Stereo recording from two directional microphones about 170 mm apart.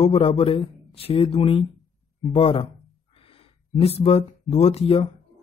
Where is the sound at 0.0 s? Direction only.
35° left (ahead or behind).